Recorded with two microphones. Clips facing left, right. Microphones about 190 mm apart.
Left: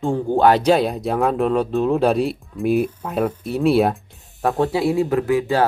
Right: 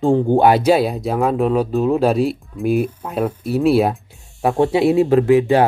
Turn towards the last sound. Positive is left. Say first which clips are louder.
# right 5 dB
turn(degrees=-20)  # may be behind; listen again after turning